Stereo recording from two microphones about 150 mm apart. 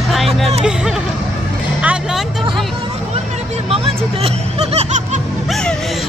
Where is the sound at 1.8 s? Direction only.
10° right (ahead or behind).